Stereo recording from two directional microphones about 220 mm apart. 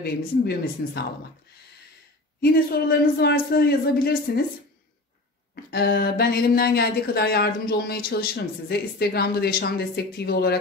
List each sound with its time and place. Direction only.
0.0 s speech: 45° left (ahead or behind)
2.4 s speech: 45° left (ahead or behind)
5.7 s speech: 45° left (ahead or behind)